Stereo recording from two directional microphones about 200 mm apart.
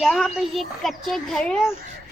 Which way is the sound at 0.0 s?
Centre (ahead or behind).